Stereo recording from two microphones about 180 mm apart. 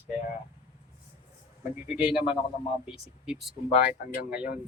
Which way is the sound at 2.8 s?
5° right (ahead or behind).